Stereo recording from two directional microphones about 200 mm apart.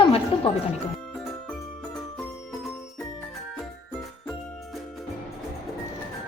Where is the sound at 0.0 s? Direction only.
25° left (ahead or behind).